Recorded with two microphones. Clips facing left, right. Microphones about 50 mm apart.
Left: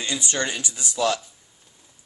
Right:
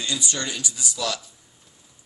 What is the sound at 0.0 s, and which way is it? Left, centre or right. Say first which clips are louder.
Speech: left 2 dB; left.